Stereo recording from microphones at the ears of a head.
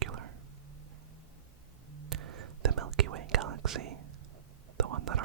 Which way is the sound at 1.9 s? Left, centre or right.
Right.